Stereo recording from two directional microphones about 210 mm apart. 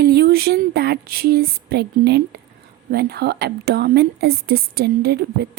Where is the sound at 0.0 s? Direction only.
50° right (ahead or behind).